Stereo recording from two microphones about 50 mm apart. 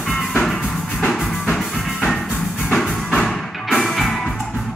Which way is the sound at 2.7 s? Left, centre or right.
Centre.